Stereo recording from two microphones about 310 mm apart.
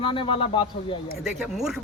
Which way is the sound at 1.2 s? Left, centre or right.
Centre.